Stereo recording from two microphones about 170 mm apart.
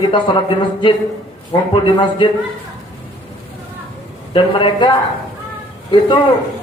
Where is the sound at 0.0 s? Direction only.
25° left (ahead or behind).